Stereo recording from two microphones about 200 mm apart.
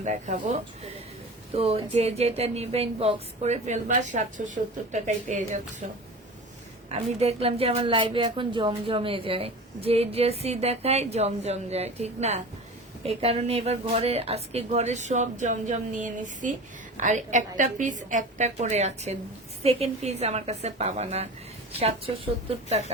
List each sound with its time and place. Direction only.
0.0 s a woman's voice: 35° right (ahead or behind)